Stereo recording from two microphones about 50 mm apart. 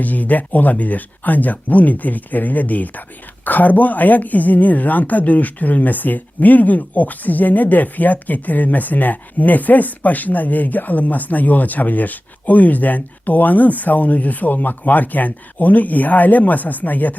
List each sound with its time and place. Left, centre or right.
0.0 s speech: left